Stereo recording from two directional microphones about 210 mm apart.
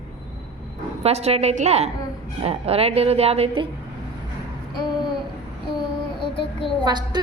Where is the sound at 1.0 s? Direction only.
30° right (ahead or behind).